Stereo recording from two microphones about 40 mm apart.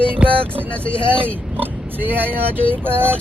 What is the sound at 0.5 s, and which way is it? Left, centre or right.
Speech, right.